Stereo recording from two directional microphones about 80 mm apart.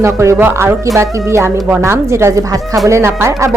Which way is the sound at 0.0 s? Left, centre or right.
Right.